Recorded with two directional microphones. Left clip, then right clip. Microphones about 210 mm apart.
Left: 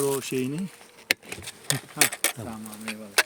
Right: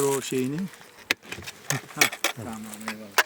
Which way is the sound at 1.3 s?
35° left (ahead or behind).